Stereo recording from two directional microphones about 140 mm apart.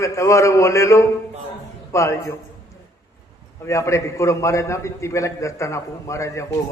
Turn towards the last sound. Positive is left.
turn(degrees=20)  # may be behind; listen again after turning